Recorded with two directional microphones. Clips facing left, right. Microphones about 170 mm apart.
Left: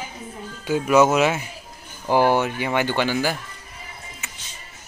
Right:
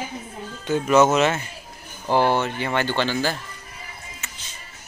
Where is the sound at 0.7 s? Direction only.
10° left (ahead or behind).